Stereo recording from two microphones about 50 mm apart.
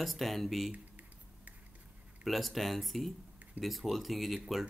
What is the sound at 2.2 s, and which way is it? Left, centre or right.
Speech, centre.